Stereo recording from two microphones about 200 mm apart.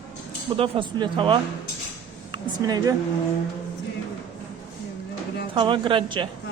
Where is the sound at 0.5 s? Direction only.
25° right (ahead or behind).